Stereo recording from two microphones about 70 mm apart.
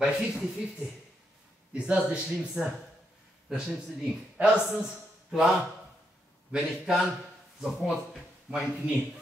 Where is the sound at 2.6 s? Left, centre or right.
Centre.